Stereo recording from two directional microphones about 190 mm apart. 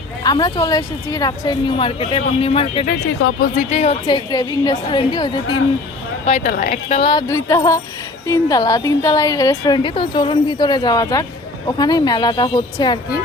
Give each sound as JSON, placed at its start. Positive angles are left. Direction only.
{"t": 0.2, "sound": "a woman's voice", "side_deg": 20}
{"t": 2.8, "sound": "a woman's voice", "side_deg": 55}
{"t": 6.2, "sound": "speech", "side_deg": 40}
{"t": 7.3, "sound": "music", "side_deg": 15}
{"t": 8.3, "sound": "a woman's voice", "side_deg": 20}